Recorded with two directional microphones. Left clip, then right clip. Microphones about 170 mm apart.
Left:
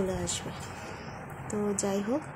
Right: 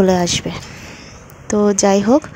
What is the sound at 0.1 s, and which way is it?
Speech, 50° right (ahead or behind).